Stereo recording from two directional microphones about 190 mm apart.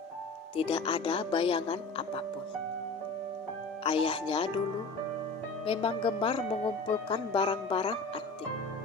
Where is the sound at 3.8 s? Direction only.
30° left (ahead or behind).